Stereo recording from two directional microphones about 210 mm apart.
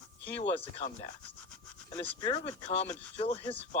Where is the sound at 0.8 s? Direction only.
25° left (ahead or behind).